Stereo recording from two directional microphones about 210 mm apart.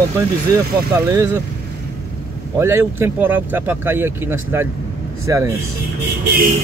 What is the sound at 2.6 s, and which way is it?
Speech, 10° right (ahead or behind).